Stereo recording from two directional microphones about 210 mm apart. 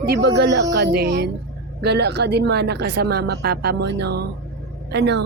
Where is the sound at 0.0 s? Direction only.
50° right (ahead or behind).